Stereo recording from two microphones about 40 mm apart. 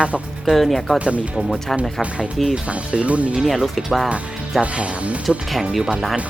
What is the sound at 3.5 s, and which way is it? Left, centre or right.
Speech, centre.